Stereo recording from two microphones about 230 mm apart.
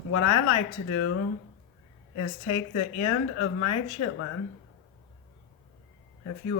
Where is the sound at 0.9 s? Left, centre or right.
Left.